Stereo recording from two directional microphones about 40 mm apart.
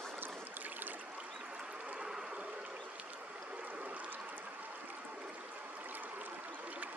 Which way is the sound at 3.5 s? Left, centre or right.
Right.